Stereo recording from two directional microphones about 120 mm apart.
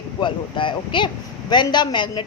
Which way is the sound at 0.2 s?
40° left (ahead or behind).